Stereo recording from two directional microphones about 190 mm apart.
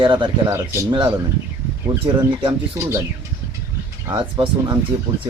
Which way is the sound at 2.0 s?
25° right (ahead or behind).